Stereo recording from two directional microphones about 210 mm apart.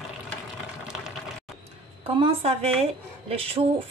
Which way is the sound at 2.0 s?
25° right (ahead or behind).